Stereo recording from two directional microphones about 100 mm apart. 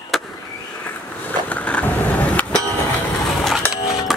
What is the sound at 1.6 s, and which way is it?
Skateboard, 15° left (ahead or behind).